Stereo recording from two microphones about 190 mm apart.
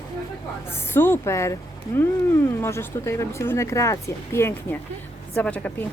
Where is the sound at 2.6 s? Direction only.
15° left (ahead or behind).